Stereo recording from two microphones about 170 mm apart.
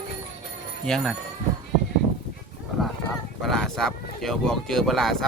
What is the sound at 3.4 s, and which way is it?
Speech, centre (ahead or behind).